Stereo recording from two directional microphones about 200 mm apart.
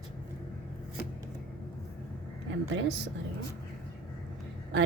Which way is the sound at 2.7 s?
65° right (ahead or behind).